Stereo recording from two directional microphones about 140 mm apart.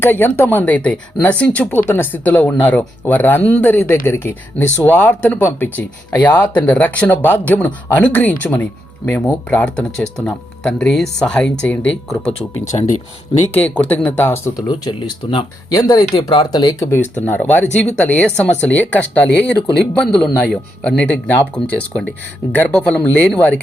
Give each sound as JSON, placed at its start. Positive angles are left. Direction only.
{"t": 0.0, "sound": "speech", "side_deg": 15}
{"t": 12.7, "sound": "speech", "side_deg": 35}
{"t": 13.5, "sound": "speech", "side_deg": 10}
{"t": 14.7, "sound": "speech", "side_deg": 40}
{"t": 15.7, "sound": "speech", "side_deg": 25}
{"t": 17.2, "sound": "speech", "side_deg": 10}